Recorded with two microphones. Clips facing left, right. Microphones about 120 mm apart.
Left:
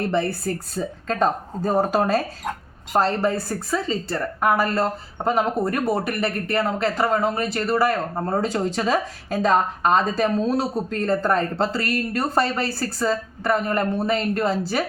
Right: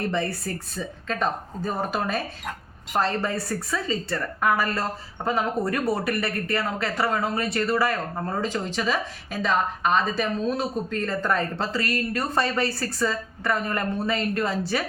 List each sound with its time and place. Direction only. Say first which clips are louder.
0.1 s a woman's voice: left 4 dB; 35° left (ahead or behind)